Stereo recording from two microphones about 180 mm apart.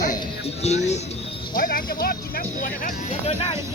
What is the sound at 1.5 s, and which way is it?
Speech, 50° left (ahead or behind).